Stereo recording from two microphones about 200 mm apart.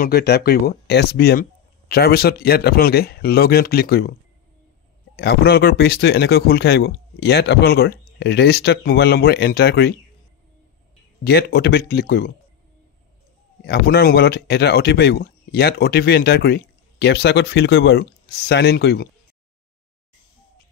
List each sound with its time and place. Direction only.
0.0 s speech: 55° left (ahead or behind)
5.1 s speech: 50° left (ahead or behind)
11.2 s speech: 55° left (ahead or behind)
13.7 s speech: 50° left (ahead or behind)